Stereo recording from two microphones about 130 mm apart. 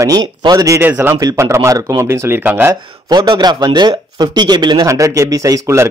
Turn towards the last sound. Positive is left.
turn(degrees=-25)  # may be behind; listen again after turning